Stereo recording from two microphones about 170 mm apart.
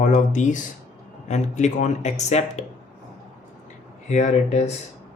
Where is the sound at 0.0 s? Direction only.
45° left (ahead or behind).